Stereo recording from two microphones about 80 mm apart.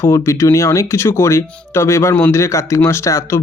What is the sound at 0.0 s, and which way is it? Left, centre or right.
Speech, left.